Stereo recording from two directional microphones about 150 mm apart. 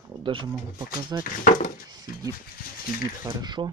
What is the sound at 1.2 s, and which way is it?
Speech, 60° left (ahead or behind).